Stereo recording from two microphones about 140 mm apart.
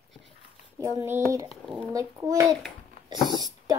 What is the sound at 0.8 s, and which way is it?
A child's voice, 20° right (ahead or behind).